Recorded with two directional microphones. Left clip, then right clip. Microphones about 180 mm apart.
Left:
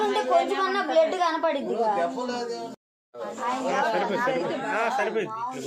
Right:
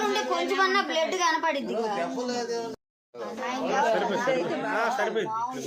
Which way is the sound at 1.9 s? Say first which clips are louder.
Left 2 dB; 50° right (ahead or behind).